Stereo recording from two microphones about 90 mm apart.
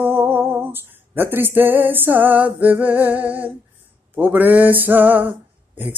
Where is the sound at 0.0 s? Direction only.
25° right (ahead or behind).